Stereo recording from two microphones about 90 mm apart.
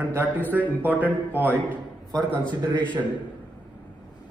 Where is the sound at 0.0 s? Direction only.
25° right (ahead or behind).